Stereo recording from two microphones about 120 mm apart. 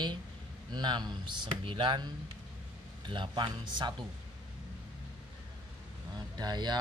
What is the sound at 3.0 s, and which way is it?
Speech, 40° right (ahead or behind).